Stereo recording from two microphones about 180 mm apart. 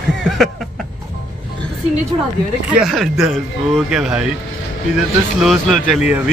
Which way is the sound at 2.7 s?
Centre (ahead or behind).